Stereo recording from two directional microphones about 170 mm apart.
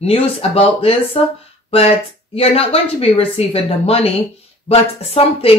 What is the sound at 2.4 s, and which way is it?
Speech, 35° left (ahead or behind).